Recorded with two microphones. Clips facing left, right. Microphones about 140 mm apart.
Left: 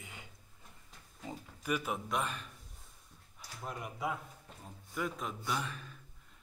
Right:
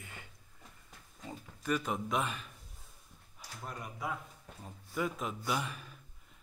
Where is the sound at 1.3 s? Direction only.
10° left (ahead or behind).